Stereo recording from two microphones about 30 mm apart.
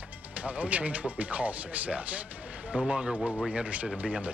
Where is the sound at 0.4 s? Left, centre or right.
Right.